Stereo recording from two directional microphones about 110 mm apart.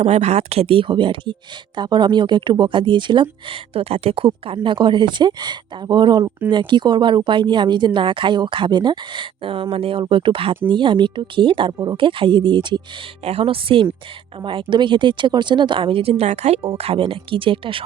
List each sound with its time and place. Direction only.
0.0 s speech: 80° right; by 12.8 s 45° right (ahead or behind)
13.2 s a woman's voice: 60° right (ahead or behind)